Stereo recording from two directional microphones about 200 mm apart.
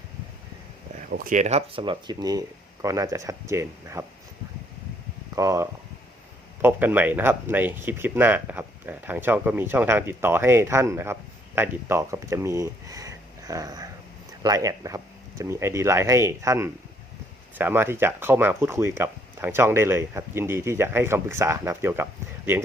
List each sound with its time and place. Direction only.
1.1 s speech: 45° right (ahead or behind); by 4.0 s 15° right (ahead or behind)
5.3 s speech: 15° right (ahead or behind)